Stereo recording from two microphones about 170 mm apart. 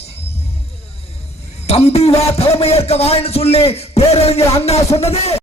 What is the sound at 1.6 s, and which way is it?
A man's voice, 35° left (ahead or behind).